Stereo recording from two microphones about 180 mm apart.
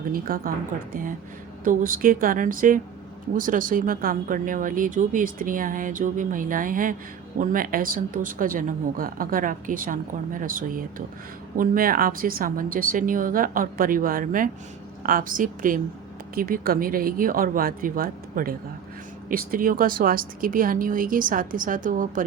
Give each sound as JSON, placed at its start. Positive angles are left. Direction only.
{"t": 0.1, "sound": "speech", "side_deg": -50}
{"t": 1.6, "sound": "speech", "side_deg": -50}